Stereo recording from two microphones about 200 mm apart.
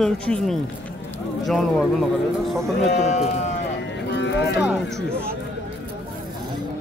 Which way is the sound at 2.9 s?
35° left (ahead or behind).